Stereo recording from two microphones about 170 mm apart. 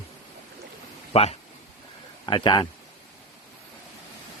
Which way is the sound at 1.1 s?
35° left (ahead or behind).